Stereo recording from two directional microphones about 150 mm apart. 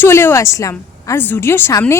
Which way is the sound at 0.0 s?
15° left (ahead or behind).